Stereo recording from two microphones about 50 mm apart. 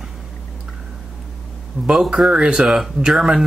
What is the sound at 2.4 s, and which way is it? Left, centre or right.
Speech, centre.